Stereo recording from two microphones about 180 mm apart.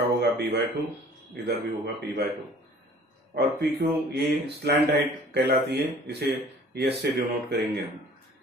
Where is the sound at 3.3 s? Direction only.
60° right (ahead or behind).